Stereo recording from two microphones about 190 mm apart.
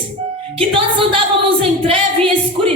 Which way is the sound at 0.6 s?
30° right (ahead or behind).